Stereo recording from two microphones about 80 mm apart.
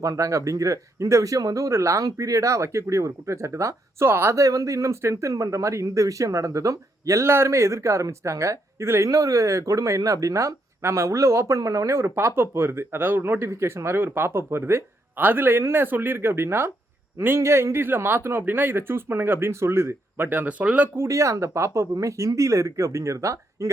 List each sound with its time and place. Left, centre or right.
0.0 s a man's voice: right; by 20.9 s centre
20.9 s speech: right